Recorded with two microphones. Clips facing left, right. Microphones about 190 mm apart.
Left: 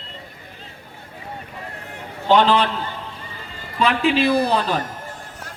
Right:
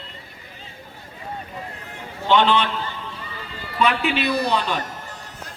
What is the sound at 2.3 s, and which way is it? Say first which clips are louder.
Speech: left 2 dB; 35° left (ahead or behind).